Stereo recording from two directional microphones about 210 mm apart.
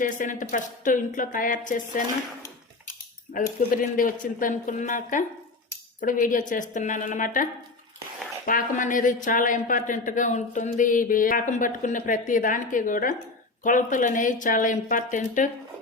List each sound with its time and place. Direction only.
0.0 s speech: 40° left (ahead or behind)
3.3 s speech: 40° left (ahead or behind)
8.4 s speech: 40° left (ahead or behind)